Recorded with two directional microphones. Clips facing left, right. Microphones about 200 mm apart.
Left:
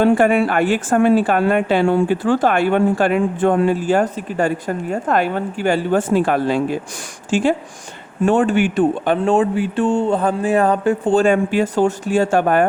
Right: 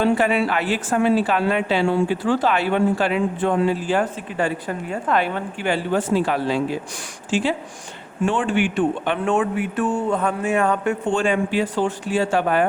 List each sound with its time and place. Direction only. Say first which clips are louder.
0.0 s speech: left 5 dB; 50° left (ahead or behind)